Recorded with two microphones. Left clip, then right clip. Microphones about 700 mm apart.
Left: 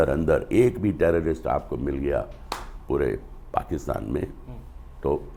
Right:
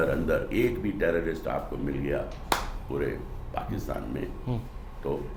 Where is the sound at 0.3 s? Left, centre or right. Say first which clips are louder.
Left 6 dB; left.